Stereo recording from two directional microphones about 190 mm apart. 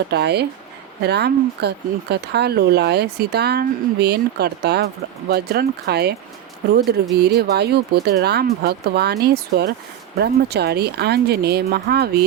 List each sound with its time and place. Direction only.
0.1 s speech: 60° right (ahead or behind)
7.2 s speech: 60° right (ahead or behind)